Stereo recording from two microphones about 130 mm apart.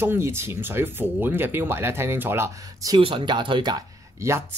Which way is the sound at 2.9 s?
40° right (ahead or behind).